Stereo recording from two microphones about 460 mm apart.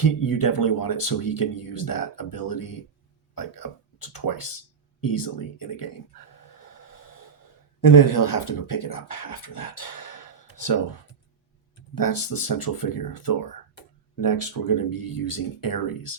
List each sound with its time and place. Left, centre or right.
0.0 s speech: left
3.3 s a sound: left
7.8 s speech: left
11.9 s speech: left